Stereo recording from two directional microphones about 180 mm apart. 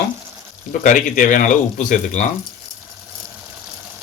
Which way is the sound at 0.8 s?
45° left (ahead or behind).